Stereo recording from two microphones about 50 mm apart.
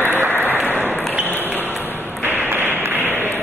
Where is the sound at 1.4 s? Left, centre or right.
Right.